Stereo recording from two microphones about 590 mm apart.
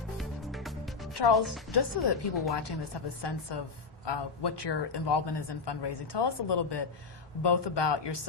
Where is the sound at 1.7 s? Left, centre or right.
Left.